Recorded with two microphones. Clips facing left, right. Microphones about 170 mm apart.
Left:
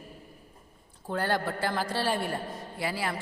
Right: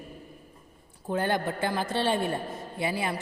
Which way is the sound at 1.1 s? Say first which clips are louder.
Right 2 dB; 20° right (ahead or behind).